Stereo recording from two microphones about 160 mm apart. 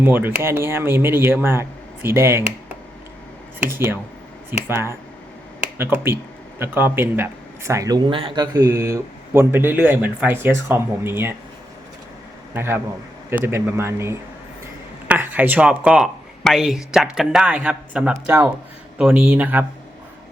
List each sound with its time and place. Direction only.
0.0 s speech: 15° right (ahead or behind)
3.6 s speech: 15° right (ahead or behind)
12.5 s speech: 15° right (ahead or behind)